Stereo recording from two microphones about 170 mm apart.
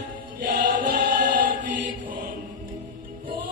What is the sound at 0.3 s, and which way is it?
Choir, 50° right (ahead or behind).